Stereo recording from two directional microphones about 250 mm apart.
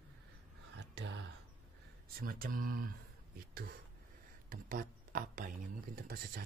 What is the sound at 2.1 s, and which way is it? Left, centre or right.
Speech, right.